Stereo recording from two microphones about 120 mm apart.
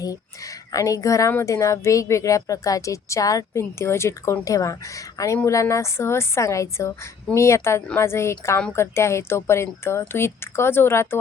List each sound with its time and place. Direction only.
0.0 s a woman's voice: 30° left (ahead or behind)